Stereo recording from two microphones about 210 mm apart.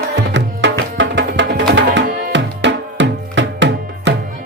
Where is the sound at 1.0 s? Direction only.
60° right (ahead or behind).